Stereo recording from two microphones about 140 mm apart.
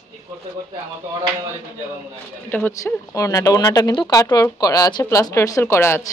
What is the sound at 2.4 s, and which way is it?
Speech, 15° left (ahead or behind).